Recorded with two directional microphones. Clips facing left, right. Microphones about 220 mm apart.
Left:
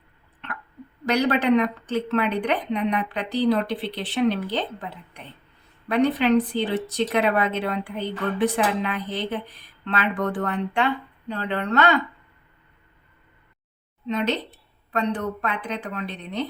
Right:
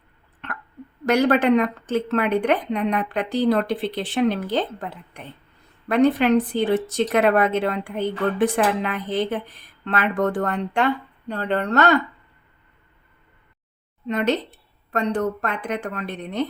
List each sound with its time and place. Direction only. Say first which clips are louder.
1.0 s a woman's voice: right 3 dB; 50° right (ahead or behind)
14.1 s a woman's voice: right 3 dB; 50° right (ahead or behind)